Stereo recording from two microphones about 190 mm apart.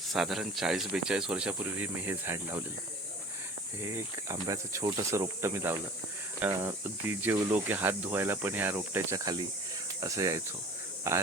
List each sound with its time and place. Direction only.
0.1 s speech: centre (ahead or behind)
3.8 s speech: 15° right (ahead or behind)